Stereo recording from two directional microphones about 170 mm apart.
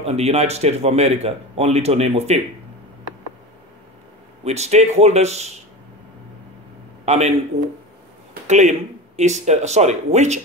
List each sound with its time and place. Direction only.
0.0 s speech: 40° right (ahead or behind)
4.5 s speech: 40° right (ahead or behind)
7.1 s speech: 40° right (ahead or behind)
8.5 s speech: 45° right (ahead or behind)